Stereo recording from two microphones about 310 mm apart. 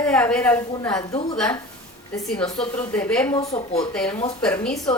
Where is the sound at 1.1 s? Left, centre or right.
Centre.